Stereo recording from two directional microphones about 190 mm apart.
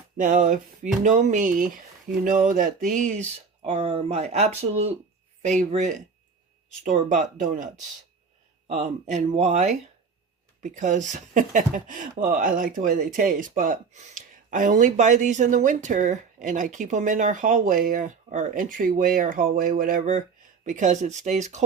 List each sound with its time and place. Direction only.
0.2 s speech: 45° right (ahead or behind)
8.7 s speech: 35° right (ahead or behind)